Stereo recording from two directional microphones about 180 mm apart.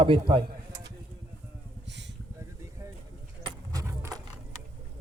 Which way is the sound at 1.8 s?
75° right (ahead or behind).